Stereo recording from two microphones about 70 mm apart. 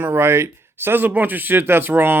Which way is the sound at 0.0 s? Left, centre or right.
Right.